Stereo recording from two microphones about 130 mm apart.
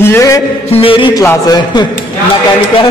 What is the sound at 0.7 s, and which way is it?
Speech, 45° left (ahead or behind).